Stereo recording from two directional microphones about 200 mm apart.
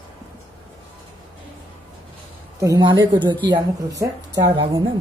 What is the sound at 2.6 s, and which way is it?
Speech, 20° right (ahead or behind).